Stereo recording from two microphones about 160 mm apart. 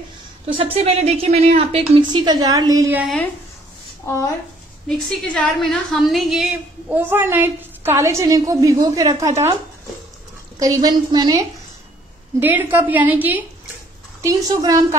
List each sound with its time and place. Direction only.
0.5 s a woman's voice: 35° right (ahead or behind)
2.0 s a woman's voice: 30° right (ahead or behind)
4.0 s a woman's voice: 15° left (ahead or behind)
4.8 s a woman's voice: 5° left (ahead or behind)
6.9 s a woman's voice: 10° right (ahead or behind)
10.6 s a woman's voice: 25° right (ahead or behind)
12.4 s a woman's voice: 10° right (ahead or behind)
14.2 s a woman's voice: 20° right (ahead or behind)